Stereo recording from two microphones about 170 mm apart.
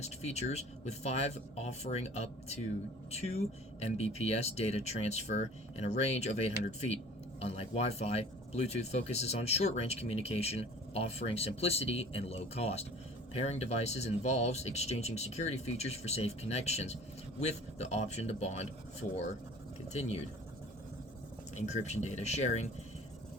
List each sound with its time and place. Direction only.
0.0 s speech: 40° left (ahead or behind)
19.9 s speech: 40° left (ahead or behind)
21.7 s speech: 40° left (ahead or behind)